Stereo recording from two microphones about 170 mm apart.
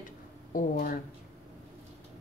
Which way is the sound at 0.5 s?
55° left (ahead or behind).